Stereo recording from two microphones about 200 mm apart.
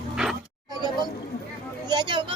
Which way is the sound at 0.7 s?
20° right (ahead or behind).